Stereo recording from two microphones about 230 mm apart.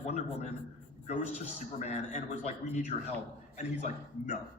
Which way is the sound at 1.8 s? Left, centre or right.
Left.